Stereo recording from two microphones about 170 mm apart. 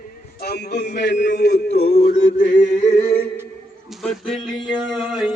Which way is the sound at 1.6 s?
70° left (ahead or behind).